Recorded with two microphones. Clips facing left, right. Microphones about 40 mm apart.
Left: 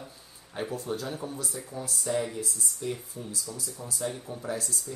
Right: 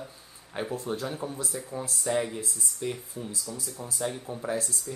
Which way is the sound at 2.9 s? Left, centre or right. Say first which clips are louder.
Even; centre.